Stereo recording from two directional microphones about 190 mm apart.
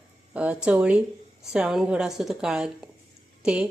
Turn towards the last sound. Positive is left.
turn(degrees=-5)  # may be behind; listen again after turning